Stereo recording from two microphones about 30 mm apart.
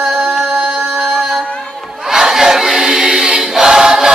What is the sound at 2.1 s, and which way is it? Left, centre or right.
Choir, centre.